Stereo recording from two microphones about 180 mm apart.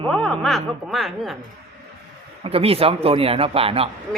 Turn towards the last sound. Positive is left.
turn(degrees=-30)  # may be behind; listen again after turning